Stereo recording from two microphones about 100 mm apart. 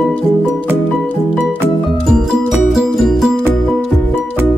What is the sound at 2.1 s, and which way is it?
Music, 5° right (ahead or behind).